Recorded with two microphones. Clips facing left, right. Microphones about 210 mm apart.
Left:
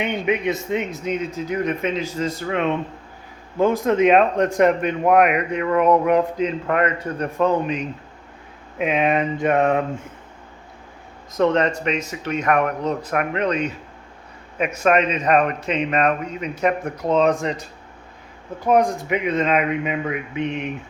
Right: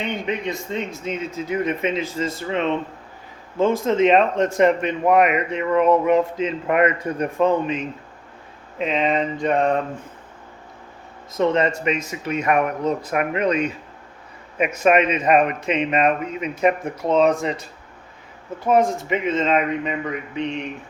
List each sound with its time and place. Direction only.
0.0 s a man's voice: 20° left (ahead or behind)
0.9 s speech: centre (ahead or behind)
2.5 s a man's voice: 5° left (ahead or behind)
3.8 s speech: centre (ahead or behind)
6.7 s speech: 10° right (ahead or behind); by 9.8 s 5° left (ahead or behind)
11.3 s speech: 5° right (ahead or behind)
14.8 s speech: 10° right (ahead or behind)
18.6 s speech: centre (ahead or behind)